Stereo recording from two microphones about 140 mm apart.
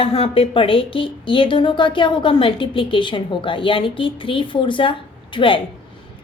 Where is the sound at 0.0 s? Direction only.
40° left (ahead or behind).